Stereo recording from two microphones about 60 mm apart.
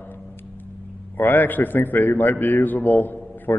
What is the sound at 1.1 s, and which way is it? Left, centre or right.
Speech, left.